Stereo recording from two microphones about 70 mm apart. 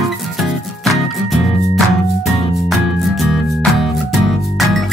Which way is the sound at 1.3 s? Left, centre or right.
Centre.